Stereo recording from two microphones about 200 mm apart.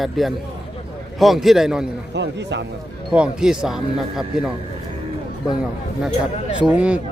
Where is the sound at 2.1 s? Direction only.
60° right (ahead or behind).